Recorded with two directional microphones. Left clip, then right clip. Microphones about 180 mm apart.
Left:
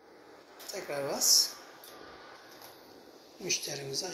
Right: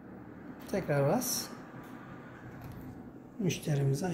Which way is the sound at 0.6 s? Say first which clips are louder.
Right 5 dB; 25° right (ahead or behind).